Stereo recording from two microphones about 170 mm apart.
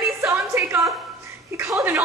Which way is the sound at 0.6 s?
15° right (ahead or behind).